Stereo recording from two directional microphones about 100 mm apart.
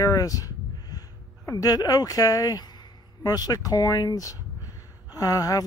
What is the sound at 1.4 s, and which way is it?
Speech, 35° left (ahead or behind).